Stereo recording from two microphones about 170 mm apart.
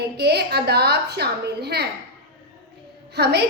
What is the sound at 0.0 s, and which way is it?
A woman's voice, 75° right (ahead or behind).